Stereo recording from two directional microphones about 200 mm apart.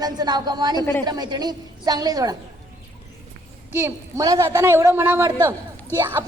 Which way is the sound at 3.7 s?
15° right (ahead or behind).